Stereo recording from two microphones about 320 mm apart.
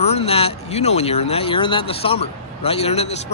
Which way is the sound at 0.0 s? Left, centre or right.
Centre.